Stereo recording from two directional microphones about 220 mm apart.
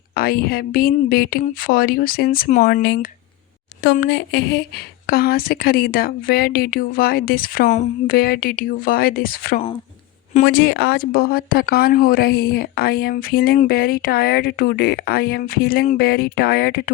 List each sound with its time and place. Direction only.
0.2 s speech: 45° left (ahead or behind)